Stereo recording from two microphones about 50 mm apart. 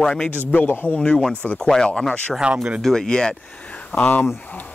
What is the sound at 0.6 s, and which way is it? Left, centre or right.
Speech, left.